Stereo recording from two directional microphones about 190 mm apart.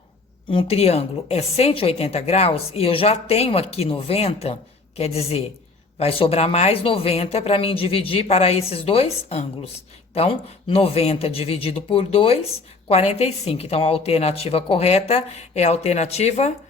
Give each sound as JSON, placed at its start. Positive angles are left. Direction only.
{"t": 0.5, "sound": "speech", "side_deg": 30}